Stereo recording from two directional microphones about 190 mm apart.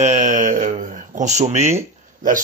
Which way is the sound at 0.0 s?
40° right (ahead or behind).